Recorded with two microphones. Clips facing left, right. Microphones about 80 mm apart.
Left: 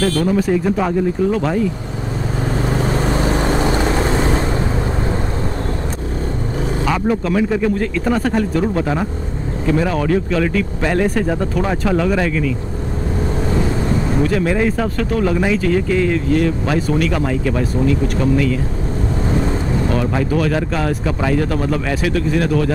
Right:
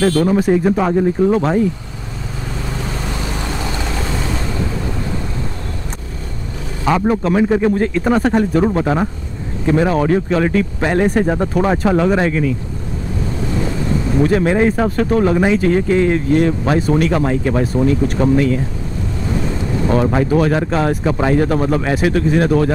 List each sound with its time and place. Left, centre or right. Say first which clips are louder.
0.0 s speech: right 2 dB; right
2.6 s vehicle: left 6 dB; left
6.9 s speech: right 4 dB; right
14.2 s speech: right 5 dB; right
19.9 s speech: right 6 dB; right